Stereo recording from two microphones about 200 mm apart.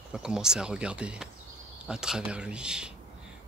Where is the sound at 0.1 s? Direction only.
5° right (ahead or behind).